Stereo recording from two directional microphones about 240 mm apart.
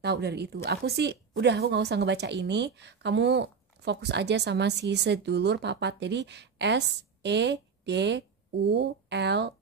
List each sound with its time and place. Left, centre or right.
0.0 s a woman's voice: right